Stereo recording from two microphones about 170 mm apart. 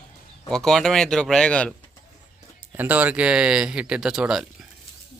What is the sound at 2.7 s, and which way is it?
Speech, 10° right (ahead or behind).